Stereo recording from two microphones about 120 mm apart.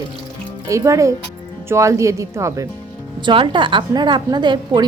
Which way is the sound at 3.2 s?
45° right (ahead or behind).